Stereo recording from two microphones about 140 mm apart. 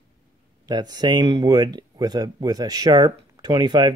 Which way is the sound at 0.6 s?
30° right (ahead or behind).